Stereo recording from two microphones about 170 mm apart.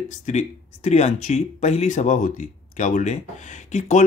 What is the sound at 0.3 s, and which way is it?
Speech, 45° left (ahead or behind).